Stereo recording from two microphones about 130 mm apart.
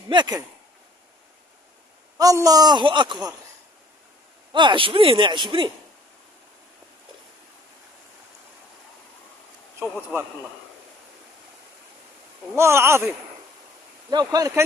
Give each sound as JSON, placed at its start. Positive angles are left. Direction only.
{"t": 0.1, "sound": "a man's voice", "side_deg": -35}
{"t": 2.1, "sound": "a man's voice", "side_deg": -25}
{"t": 4.5, "sound": "a man's voice", "side_deg": -40}
{"t": 12.5, "sound": "speech", "side_deg": -20}
{"t": 14.1, "sound": "speech", "side_deg": -30}